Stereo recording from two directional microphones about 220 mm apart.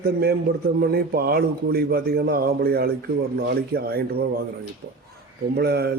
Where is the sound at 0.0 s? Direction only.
45° right (ahead or behind).